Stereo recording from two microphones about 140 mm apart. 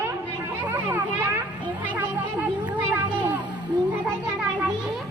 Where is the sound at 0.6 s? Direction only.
10° right (ahead or behind).